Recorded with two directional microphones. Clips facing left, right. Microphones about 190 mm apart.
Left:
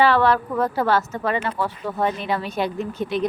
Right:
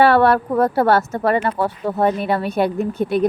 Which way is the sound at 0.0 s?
55° right (ahead or behind).